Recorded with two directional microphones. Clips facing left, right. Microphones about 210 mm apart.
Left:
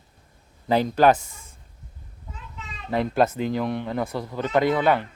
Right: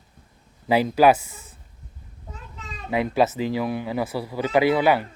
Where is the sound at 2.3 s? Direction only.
40° right (ahead or behind).